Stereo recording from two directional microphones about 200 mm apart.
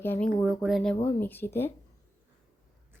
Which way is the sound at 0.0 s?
10° left (ahead or behind).